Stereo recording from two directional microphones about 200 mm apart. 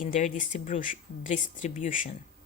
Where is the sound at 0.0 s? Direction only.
35° left (ahead or behind).